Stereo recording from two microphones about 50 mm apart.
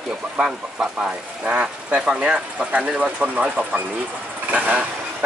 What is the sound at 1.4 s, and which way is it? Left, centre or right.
Speech, right.